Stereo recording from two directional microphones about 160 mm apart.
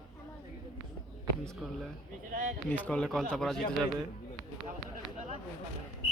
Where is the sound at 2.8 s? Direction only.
5° left (ahead or behind).